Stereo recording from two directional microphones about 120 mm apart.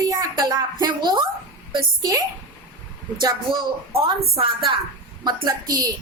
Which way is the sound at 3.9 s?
50° right (ahead or behind).